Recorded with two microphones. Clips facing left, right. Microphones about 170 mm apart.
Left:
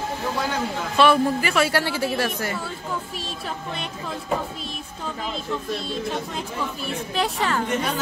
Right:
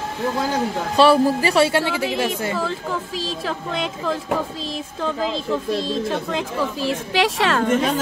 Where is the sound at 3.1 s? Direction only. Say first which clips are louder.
Right 6 dB; 90° right.